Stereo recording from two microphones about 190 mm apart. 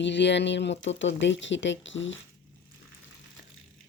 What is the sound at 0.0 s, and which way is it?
Speech, 70° left (ahead or behind).